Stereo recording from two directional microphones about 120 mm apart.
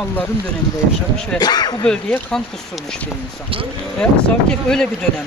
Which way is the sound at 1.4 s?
35° left (ahead or behind).